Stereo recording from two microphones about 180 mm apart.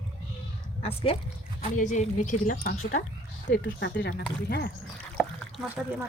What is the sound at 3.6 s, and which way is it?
Speech, 80° left.